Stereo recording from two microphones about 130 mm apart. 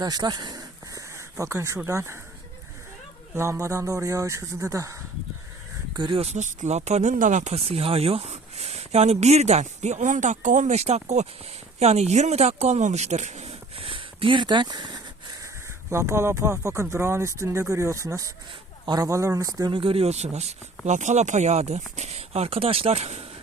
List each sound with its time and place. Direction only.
0.0 s speech: 30° right (ahead or behind)
3.3 s speech: 20° right (ahead or behind)
5.9 s speech: 40° right (ahead or behind)
15.9 s speech: 20° right (ahead or behind); by 23.2 s 55° right (ahead or behind)